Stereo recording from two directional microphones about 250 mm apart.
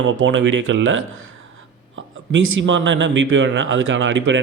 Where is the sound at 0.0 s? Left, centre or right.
Right.